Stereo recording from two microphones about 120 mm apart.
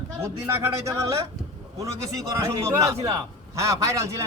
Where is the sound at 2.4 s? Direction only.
25° right (ahead or behind).